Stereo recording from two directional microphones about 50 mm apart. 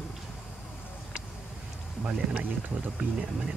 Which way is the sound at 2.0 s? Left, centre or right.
Right.